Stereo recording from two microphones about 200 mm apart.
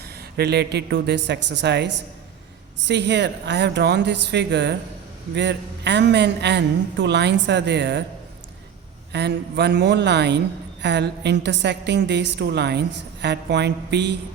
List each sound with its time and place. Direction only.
0.3 s a man's voice: 55° right (ahead or behind)
9.1 s a man's voice: 55° right (ahead or behind)